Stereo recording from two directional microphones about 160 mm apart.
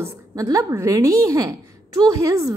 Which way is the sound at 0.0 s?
20° right (ahead or behind).